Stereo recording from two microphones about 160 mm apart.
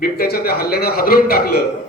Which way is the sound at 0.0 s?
70° left (ahead or behind).